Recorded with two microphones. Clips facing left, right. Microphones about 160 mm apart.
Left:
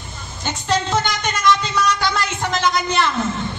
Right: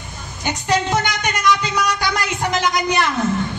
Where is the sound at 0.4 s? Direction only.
15° right (ahead or behind).